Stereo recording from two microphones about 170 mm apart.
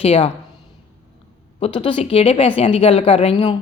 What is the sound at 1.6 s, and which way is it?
Speech, 30° left (ahead or behind).